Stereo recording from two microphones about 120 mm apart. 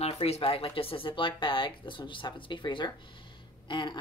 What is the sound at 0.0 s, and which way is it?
Speech, 55° left (ahead or behind).